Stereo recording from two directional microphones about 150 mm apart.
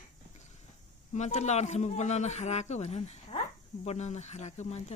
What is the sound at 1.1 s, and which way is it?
Speech, 50° left (ahead or behind).